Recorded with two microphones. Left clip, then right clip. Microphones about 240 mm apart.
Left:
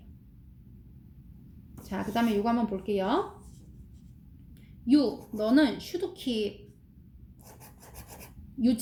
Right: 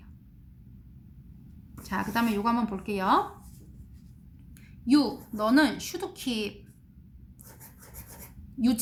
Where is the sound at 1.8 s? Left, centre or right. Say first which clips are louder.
Right 1 dB; right.